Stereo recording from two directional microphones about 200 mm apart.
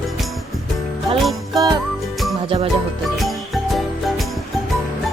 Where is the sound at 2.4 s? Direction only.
25° right (ahead or behind).